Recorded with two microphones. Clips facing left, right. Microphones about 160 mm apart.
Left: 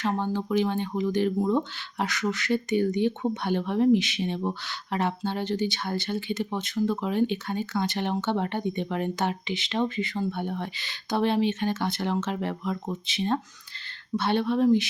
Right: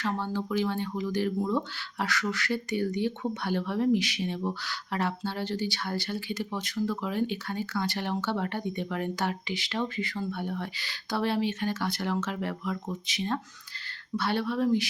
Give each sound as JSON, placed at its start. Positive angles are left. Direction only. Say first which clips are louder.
{"t": 0.0, "sound": "speech", "louder": "left 3 dB", "side_deg": 20}